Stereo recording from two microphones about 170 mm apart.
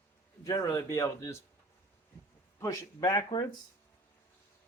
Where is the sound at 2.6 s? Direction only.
20° left (ahead or behind).